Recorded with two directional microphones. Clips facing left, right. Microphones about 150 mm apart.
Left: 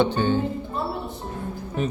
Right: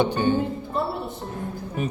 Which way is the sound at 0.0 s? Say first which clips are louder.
Even; 15° right (ahead or behind).